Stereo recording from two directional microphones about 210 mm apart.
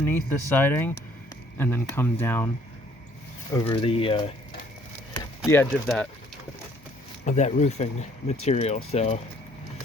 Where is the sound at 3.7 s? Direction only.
25° left (ahead or behind).